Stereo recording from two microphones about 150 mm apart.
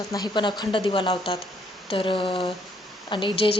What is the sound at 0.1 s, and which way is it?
Speech, 30° left (ahead or behind).